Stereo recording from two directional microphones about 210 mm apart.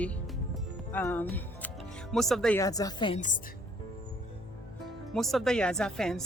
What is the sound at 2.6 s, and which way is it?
Speech, 15° left (ahead or behind).